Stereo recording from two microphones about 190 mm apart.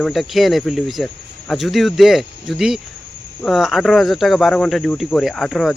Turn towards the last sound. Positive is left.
turn(degrees=0)  # may be behind; listen again after turning